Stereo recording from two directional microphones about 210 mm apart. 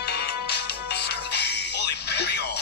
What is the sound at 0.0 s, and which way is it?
Music, 50° left (ahead or behind).